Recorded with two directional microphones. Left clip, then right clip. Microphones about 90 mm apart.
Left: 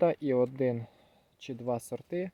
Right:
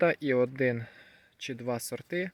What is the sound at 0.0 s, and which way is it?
Speech, 15° left (ahead or behind).